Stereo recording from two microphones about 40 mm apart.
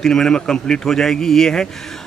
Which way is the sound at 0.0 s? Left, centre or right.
Centre.